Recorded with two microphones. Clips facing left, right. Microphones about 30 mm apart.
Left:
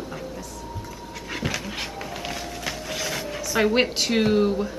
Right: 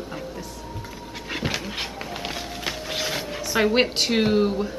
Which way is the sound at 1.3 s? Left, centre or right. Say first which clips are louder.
Right 1 dB; centre.